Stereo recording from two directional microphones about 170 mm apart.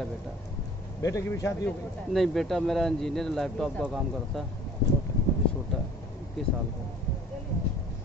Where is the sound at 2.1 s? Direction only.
Centre (ahead or behind).